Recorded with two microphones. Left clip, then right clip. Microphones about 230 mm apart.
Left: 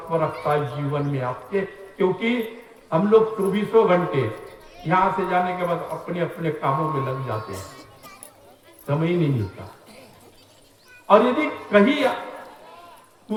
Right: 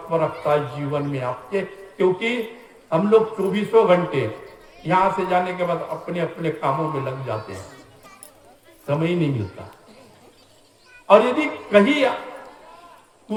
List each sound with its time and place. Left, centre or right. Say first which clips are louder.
0.1 s a man's voice: right 2 dB; right
8.9 s a man's voice: right 1 dB; right
11.1 s a man's voice: right 2 dB; right